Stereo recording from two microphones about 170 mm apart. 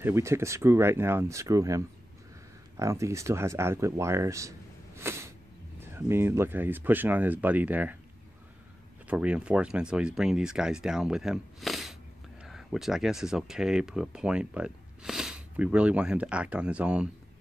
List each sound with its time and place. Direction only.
0.0 s speech: 15° right (ahead or behind)
2.8 s speech: 15° right (ahead or behind)
9.0 s speech: 5° right (ahead or behind)